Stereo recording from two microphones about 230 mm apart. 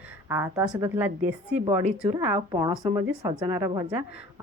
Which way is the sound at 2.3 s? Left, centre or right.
Right.